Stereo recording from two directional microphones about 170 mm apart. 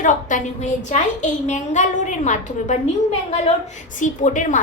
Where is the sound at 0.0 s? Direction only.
45° left (ahead or behind).